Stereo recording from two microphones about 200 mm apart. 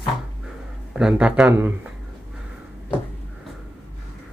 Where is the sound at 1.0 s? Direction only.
5° right (ahead or behind).